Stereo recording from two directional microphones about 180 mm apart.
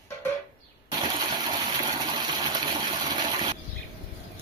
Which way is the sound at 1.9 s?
25° right (ahead or behind).